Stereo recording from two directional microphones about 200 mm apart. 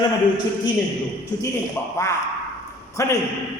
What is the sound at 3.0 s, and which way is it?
Speech, 15° left (ahead or behind).